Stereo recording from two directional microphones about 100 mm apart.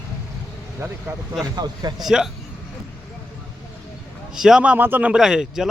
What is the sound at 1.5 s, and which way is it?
Speech, 45° right (ahead or behind).